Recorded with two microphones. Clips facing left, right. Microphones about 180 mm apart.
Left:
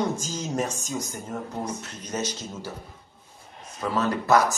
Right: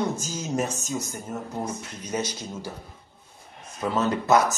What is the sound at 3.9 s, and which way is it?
Speech, 20° right (ahead or behind).